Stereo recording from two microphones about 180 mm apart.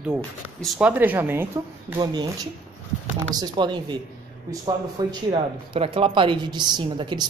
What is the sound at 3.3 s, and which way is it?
Speech, 25° right (ahead or behind).